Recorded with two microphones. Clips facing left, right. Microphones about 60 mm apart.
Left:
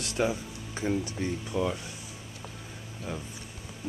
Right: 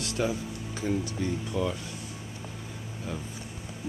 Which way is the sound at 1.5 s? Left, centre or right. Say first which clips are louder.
Left 1 dB; centre.